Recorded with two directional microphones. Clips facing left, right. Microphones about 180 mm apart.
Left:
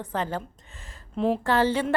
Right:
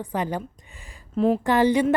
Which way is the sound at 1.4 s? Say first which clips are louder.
Right 4 dB; 15° right (ahead or behind).